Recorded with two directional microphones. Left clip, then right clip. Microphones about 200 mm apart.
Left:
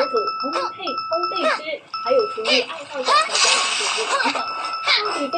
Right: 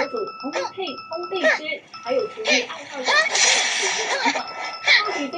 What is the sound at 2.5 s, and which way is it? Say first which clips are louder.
Speech: left 1 dB; 15° left (ahead or behind).